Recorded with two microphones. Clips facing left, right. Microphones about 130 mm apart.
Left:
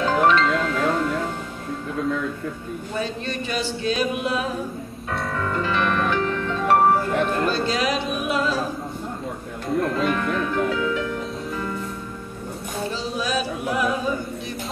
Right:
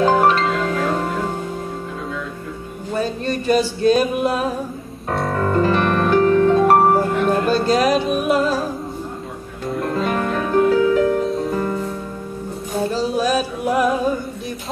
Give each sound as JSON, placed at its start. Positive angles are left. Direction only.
{"t": 0.0, "sound": "music", "side_deg": -40}
{"t": 3.0, "sound": "a sound", "side_deg": -40}
{"t": 5.3, "sound": "music", "side_deg": -40}
{"t": 9.9, "sound": "music", "side_deg": -40}
{"t": 12.9, "sound": "music", "side_deg": -45}